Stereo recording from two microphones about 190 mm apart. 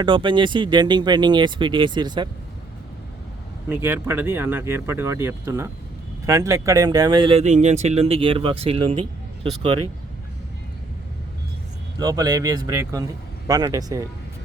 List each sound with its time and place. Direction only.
0.0 s speech: 25° right (ahead or behind)
3.7 s speech: 10° right (ahead or behind); by 9.8 s 30° right (ahead or behind)
11.9 s speech: 20° right (ahead or behind)